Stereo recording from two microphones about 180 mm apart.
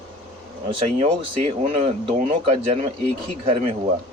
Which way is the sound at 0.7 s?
30° right (ahead or behind).